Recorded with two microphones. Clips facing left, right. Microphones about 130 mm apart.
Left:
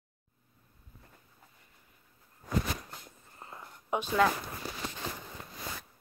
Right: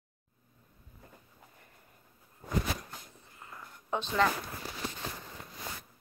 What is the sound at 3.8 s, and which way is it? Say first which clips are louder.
Speech: left 2 dB; 10° left (ahead or behind).